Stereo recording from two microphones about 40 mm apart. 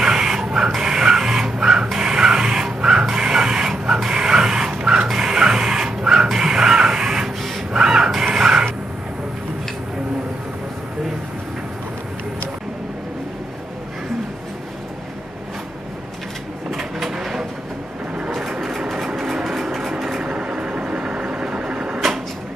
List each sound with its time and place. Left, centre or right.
0.0 s dog: centre
0.7 s printer: centre
4.1 s dog: centre
5.0 s a sound: centre
6.3 s printer: centre
7.7 s crow: centre
16.7 s vehicle: centre
19.0 s vehicle: centre
19.4 s a sound: centre
20.0 s vehicle: centre
20.2 s vehicle: right